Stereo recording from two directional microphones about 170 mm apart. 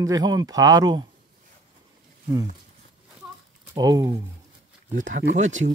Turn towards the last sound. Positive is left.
turn(degrees=-45)  # may be behind; listen again after turning